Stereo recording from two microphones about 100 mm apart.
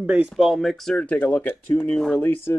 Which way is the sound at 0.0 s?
10° right (ahead or behind).